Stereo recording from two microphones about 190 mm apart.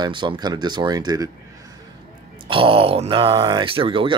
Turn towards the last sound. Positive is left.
turn(degrees=-25)  # may be behind; listen again after turning